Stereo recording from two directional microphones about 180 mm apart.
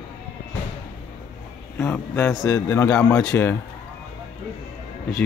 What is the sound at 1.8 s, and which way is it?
A man's voice, 10° left (ahead or behind).